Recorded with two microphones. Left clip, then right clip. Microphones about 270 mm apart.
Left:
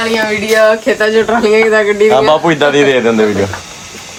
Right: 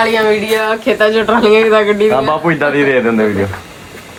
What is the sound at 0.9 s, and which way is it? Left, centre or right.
Speech, centre.